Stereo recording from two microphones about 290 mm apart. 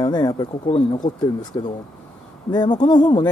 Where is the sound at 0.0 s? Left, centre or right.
Centre.